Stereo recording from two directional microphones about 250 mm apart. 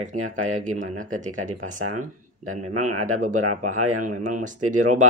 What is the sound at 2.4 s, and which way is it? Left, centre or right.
Speech, right.